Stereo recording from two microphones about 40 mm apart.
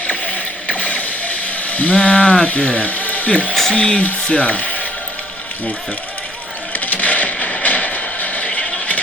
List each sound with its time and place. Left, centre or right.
0.1 s mechanisms: left
3.7 s speech: left
6.7 s a sound: left